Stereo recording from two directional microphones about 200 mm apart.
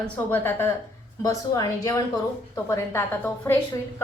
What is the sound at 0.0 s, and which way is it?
A woman's voice, 10° left (ahead or behind).